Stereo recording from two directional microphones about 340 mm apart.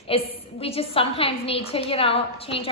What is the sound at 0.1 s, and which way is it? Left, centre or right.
A woman's voice, centre.